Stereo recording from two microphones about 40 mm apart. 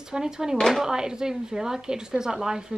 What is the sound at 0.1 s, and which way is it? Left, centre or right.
Speech, centre.